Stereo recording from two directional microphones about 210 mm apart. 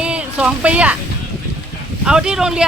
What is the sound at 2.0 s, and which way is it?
Speech, 5° right (ahead or behind).